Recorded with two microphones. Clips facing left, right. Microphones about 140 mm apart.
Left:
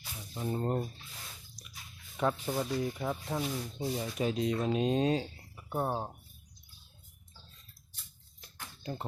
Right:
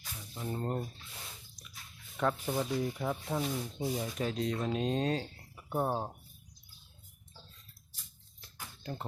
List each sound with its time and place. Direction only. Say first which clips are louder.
0.3 s speech: left 3 dB; 15° left (ahead or behind); by 4.1 s 5° right (ahead or behind)
4.2 s speech: left 5 dB; 15° left (ahead or behind)
5.5 s speech: right 1 dB; 5° right (ahead or behind)
8.8 s speech: left 2 dB; 10° left (ahead or behind)